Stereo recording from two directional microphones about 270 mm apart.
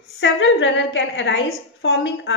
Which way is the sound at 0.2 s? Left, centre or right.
Left.